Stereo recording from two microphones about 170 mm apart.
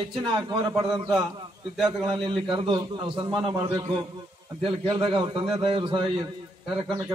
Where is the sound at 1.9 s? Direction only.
25° right (ahead or behind).